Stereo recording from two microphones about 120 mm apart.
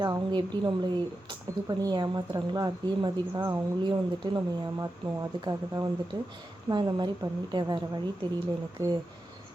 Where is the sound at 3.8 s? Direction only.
40° right (ahead or behind).